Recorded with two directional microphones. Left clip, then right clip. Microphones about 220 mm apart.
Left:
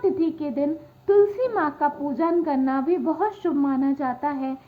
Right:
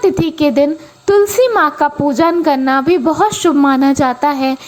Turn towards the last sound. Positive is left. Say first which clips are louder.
# right 13 dB
turn(degrees=-30)  # may be behind; listen again after turning